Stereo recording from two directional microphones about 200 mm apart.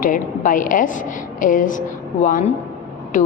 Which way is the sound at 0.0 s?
40° left (ahead or behind).